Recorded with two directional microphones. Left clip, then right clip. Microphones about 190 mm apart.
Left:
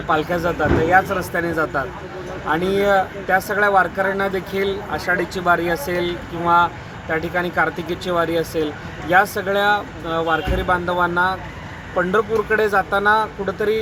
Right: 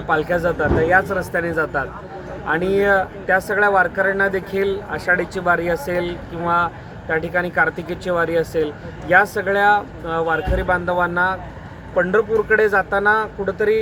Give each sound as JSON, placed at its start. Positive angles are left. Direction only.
{"t": 0.1, "sound": "speech", "side_deg": -10}
{"t": 5.9, "sound": "speech", "side_deg": -35}
{"t": 6.4, "sound": "speech", "side_deg": -10}